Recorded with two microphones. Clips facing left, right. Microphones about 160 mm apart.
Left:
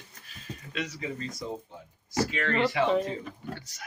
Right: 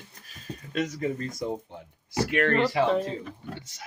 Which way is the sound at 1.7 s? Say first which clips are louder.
Even; 65° right (ahead or behind).